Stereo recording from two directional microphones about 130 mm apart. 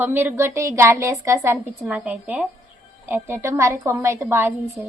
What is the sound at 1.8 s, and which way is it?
A woman's voice, 10° right (ahead or behind).